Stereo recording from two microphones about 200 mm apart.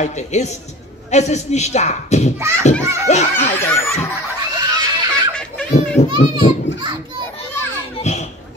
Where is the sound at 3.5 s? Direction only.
10° left (ahead or behind).